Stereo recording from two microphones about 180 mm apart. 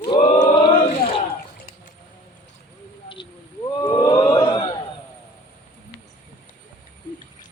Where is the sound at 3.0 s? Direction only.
25° left (ahead or behind).